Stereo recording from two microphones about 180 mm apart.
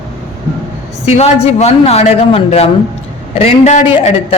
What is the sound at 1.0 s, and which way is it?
A man's voice, 35° left (ahead or behind).